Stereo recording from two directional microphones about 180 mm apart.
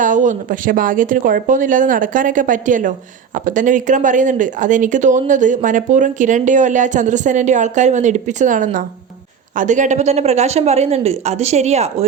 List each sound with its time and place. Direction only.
0.0 s speech: 45° right (ahead or behind)